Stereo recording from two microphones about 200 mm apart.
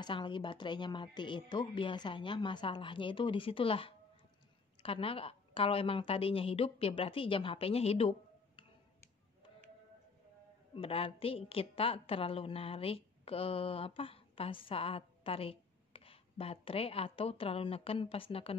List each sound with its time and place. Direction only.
0.0 s a woman's voice: 25° left (ahead or behind)
10.7 s a woman's voice: 30° left (ahead or behind)